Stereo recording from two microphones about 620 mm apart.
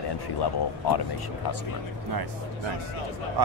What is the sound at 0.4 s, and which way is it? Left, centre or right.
Speech, left.